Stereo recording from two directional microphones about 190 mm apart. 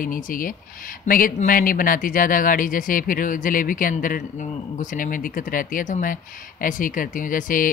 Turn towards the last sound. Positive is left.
turn(degrees=45)  # may be behind; listen again after turning